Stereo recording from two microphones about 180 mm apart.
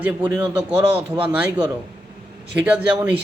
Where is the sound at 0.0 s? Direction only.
10° right (ahead or behind).